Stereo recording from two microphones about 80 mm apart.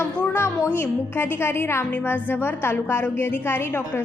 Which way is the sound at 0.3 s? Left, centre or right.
Left.